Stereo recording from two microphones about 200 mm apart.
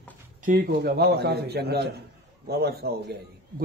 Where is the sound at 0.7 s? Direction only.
55° right (ahead or behind).